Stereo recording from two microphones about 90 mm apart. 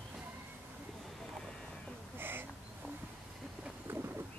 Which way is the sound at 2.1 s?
25° right (ahead or behind).